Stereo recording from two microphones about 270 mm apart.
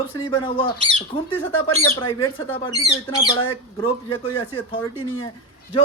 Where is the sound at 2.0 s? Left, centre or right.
Centre.